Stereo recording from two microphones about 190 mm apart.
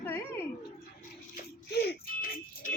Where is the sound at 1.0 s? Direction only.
55° left (ahead or behind).